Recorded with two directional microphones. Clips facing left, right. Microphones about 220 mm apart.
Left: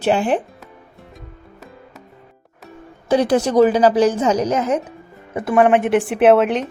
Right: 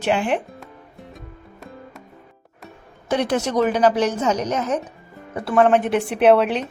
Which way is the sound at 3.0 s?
35° left (ahead or behind).